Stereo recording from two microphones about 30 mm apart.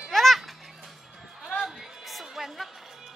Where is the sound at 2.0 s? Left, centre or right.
Centre.